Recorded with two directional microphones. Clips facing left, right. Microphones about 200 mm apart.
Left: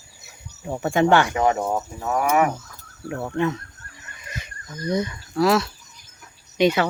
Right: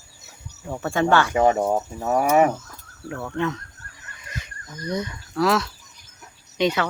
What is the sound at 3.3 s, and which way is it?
Speech, 10° left (ahead or behind).